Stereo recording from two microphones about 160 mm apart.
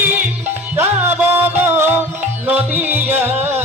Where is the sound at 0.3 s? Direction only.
15° right (ahead or behind).